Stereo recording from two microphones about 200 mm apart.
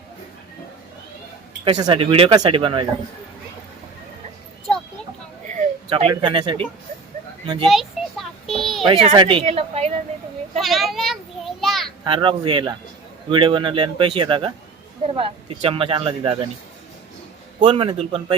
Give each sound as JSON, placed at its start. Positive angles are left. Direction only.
{"t": 1.6, "sound": "speech", "side_deg": -25}
{"t": 5.9, "sound": "speech", "side_deg": -25}
{"t": 7.7, "sound": "a sound", "side_deg": 0}
{"t": 8.9, "sound": "speech", "side_deg": -30}
{"t": 10.6, "sound": "a sound", "side_deg": 0}
{"t": 12.0, "sound": "speech", "side_deg": -25}
{"t": 17.6, "sound": "speech", "side_deg": -25}